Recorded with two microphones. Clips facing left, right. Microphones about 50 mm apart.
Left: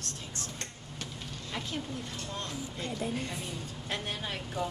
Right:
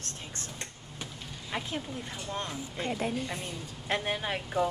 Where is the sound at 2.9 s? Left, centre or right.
Right.